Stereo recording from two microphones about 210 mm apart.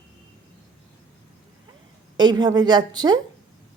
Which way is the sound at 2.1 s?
20° right (ahead or behind).